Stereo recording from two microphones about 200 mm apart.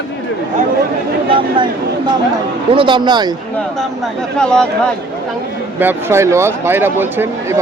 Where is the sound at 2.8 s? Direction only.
25° right (ahead or behind).